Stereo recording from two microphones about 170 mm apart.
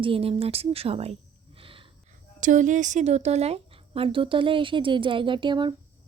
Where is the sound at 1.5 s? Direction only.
30° right (ahead or behind).